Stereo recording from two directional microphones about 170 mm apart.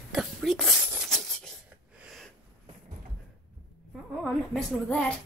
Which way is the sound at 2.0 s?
Centre (ahead or behind).